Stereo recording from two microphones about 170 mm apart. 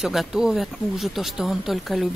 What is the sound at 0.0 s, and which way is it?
Speech, centre (ahead or behind).